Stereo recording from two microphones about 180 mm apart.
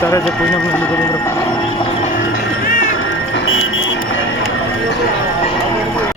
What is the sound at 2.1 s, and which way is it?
Music, 45° left (ahead or behind).